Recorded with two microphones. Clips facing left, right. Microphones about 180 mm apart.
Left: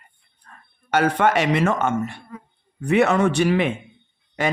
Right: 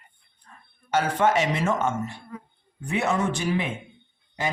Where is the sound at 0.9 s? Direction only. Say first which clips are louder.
Left 3 dB; 65° left (ahead or behind).